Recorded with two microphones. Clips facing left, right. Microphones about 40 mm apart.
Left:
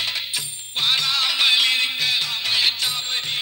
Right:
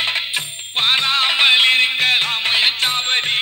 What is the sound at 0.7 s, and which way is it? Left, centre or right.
Music, right.